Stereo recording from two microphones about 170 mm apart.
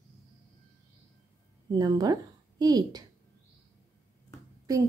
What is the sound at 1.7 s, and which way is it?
Speech, 25° right (ahead or behind).